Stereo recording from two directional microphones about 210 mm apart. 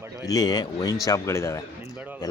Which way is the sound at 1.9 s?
10° right (ahead or behind).